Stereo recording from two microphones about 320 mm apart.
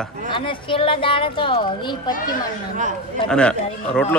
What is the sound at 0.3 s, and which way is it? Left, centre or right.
Speech, centre.